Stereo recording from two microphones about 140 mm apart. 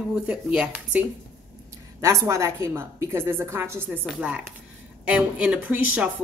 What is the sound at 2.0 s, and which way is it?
A woman's voice, 20° right (ahead or behind).